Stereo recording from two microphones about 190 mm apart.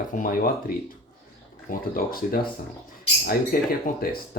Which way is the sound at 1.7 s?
50° left (ahead or behind).